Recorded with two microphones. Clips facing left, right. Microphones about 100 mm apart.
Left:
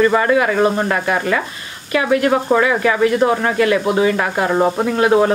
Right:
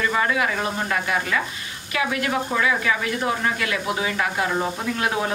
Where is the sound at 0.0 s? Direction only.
45° left (ahead or behind).